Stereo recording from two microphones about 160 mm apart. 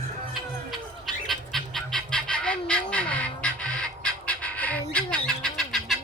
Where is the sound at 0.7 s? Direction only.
Centre (ahead or behind).